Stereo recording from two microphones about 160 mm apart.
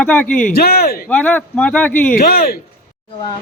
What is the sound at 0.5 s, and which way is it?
Speech, 70° left (ahead or behind).